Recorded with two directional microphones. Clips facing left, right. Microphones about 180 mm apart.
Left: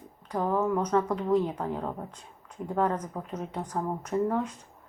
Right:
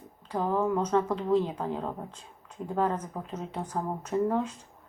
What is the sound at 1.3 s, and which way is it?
A woman's voice, 20° right (ahead or behind).